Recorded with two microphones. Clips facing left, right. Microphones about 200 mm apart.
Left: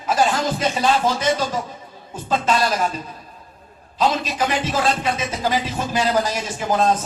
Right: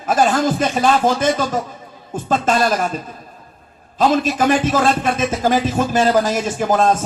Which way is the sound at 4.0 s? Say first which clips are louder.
Right 5 dB; 50° right (ahead or behind).